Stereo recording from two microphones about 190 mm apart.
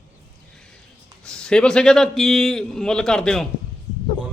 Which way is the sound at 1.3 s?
5° left (ahead or behind).